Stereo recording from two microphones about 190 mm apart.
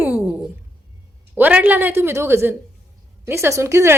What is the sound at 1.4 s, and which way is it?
Speech, 10° right (ahead or behind).